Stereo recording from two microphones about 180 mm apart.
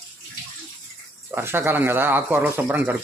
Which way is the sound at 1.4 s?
10° right (ahead or behind).